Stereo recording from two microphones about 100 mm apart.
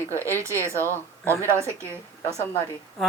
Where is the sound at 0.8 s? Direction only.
25° left (ahead or behind).